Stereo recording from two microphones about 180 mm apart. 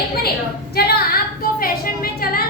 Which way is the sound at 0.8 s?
60° left (ahead or behind).